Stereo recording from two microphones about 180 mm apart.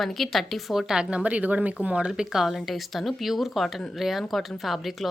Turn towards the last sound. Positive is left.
turn(degrees=0)  # may be behind; listen again after turning